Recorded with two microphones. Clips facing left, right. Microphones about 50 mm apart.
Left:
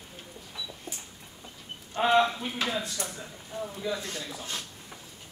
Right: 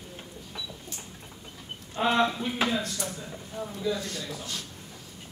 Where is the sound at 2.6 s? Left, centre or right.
Right.